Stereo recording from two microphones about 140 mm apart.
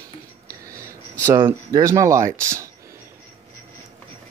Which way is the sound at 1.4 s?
35° right (ahead or behind).